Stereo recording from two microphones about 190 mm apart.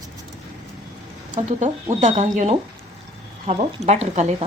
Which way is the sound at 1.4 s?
40° right (ahead or behind).